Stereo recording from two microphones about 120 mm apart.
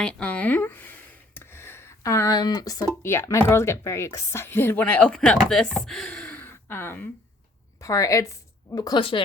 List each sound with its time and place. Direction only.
0.0 s a sound: 10° left (ahead or behind); by 2.8 s 30° left (ahead or behind)
3.0 s a woman's voice: 20° left (ahead or behind)
9.0 s speech: 45° left (ahead or behind)